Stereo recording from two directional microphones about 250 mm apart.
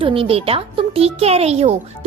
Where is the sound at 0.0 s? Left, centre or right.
Right.